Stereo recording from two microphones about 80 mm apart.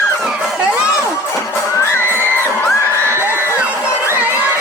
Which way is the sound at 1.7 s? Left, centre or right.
Left.